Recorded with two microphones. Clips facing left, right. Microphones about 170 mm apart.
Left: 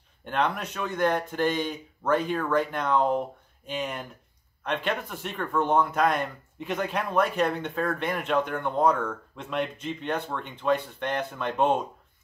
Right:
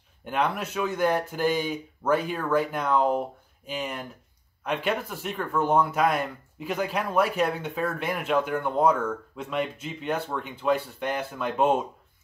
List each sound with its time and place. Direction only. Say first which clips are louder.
0.2 s speech: even; 5° right (ahead or behind)